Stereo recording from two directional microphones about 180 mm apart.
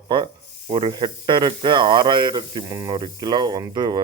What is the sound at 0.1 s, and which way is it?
A man's voice, 25° right (ahead or behind).